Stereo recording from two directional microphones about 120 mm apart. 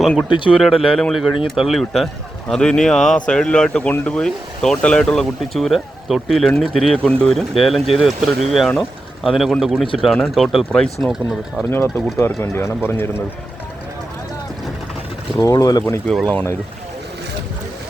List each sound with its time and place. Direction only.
0.3 s speech: 40° left (ahead or behind)
0.6 s speech: centre (ahead or behind)
11.7 s speech: 20° left (ahead or behind)
15.4 s speech: 30° left (ahead or behind)
16.0 s speech: 5° left (ahead or behind)